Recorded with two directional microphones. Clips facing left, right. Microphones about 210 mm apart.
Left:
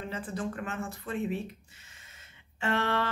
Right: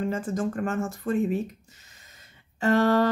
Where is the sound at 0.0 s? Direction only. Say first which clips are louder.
Right 8 dB; 45° right (ahead or behind).